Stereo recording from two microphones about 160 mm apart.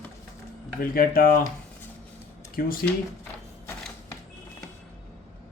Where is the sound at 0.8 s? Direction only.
65° left (ahead or behind).